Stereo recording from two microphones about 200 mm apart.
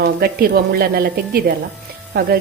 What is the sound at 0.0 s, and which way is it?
A woman's voice, 50° right (ahead or behind).